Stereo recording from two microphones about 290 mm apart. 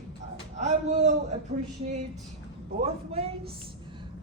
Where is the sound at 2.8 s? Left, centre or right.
Right.